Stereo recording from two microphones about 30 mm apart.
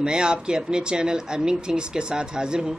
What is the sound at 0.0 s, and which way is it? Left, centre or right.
Speech, right.